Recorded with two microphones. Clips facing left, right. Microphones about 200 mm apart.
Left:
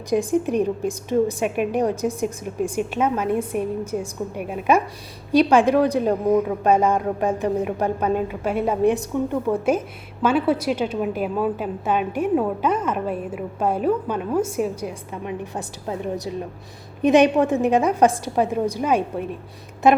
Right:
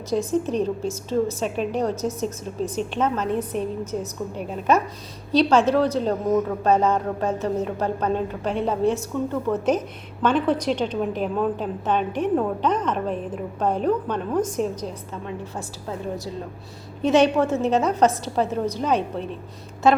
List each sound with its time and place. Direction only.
0.1 s a woman's voice: 15° left (ahead or behind)